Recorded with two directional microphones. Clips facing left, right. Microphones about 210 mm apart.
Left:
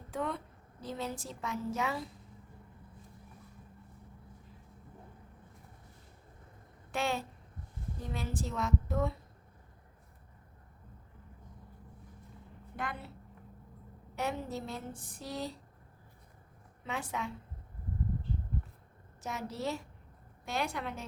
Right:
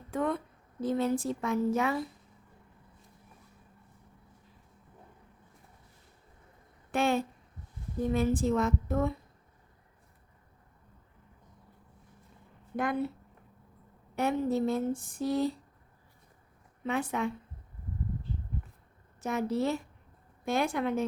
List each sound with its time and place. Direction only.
0.1 s a woman's voice: 50° right (ahead or behind)
6.9 s speech: 55° right (ahead or behind)
12.7 s a woman's voice: 45° right (ahead or behind)
14.2 s speech: 55° right (ahead or behind)
16.8 s speech: 55° right (ahead or behind)
19.2 s speech: 55° right (ahead or behind)